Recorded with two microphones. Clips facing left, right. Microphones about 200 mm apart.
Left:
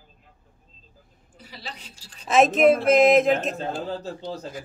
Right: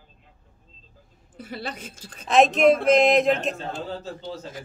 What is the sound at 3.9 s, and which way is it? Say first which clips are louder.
Speech: left 2 dB; 35° left (ahead or behind).